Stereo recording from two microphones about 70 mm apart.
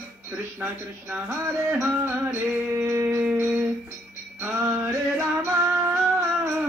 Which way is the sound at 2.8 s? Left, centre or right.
Right.